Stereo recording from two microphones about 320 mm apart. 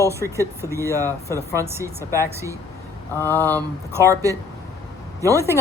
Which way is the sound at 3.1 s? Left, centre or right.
Centre.